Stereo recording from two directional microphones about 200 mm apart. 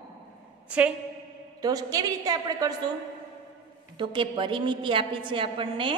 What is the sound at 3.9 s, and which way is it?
A woman's voice, 25° right (ahead or behind).